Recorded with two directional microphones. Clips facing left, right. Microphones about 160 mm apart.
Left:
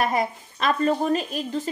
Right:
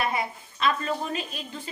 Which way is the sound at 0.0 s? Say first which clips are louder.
Left 5 dB; 45° left (ahead or behind).